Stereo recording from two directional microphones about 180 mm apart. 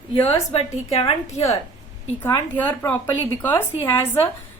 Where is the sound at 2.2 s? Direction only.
10° left (ahead or behind).